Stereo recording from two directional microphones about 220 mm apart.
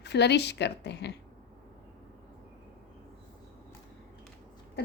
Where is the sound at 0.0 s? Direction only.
50° left (ahead or behind).